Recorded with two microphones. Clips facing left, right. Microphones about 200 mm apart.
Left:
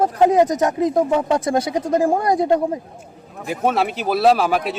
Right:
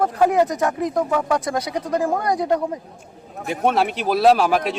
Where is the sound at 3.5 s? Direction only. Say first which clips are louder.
Even; centre (ahead or behind).